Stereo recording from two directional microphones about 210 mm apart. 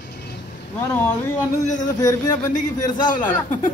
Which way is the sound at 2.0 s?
15° left (ahead or behind).